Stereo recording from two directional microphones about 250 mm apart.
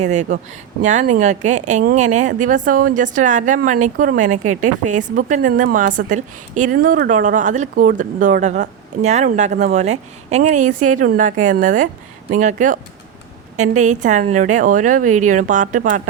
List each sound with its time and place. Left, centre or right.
0.0 s a woman's voice: right